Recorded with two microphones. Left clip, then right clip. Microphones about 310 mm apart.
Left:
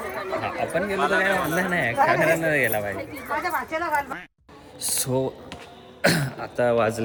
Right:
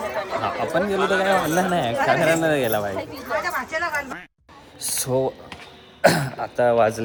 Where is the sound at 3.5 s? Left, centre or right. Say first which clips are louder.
Even; centre.